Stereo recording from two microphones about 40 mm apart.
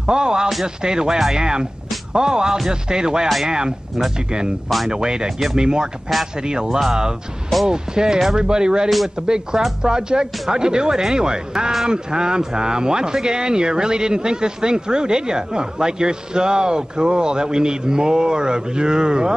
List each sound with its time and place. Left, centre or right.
0.0 s speech: centre
4.6 s speech: centre
4.9 s speech: centre
8.8 s speech: centre
9.8 s speech: centre